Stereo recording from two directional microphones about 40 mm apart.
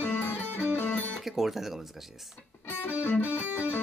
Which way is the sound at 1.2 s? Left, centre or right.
Centre.